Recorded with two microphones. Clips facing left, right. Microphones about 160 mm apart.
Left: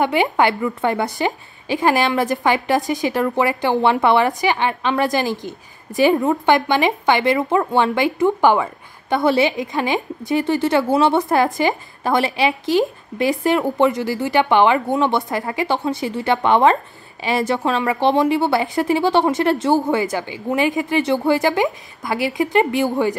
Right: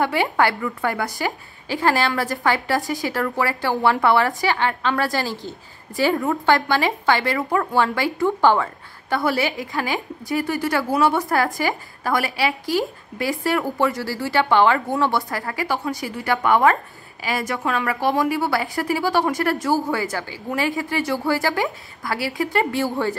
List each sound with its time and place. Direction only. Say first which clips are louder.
0.0 s a woman's voice: left 3 dB; 20° left (ahead or behind)